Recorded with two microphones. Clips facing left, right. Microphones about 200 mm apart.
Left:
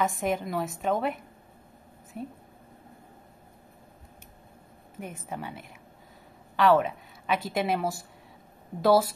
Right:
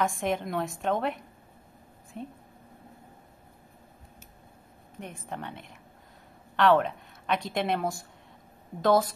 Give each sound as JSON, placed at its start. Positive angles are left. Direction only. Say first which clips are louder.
{"t": 0.0, "sound": "a woman's voice", "louder": "left 1 dB", "side_deg": 0}
{"t": 5.0, "sound": "a woman's voice", "louder": "left 1 dB", "side_deg": 5}